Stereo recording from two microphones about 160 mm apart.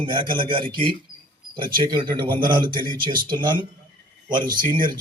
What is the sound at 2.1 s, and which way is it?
Speech, 30° right (ahead or behind).